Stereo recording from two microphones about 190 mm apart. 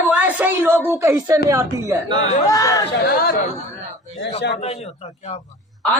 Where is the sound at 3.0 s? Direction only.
50° left (ahead or behind).